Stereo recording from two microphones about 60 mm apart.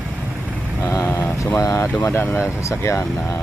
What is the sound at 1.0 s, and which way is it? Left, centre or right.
Mantra, left.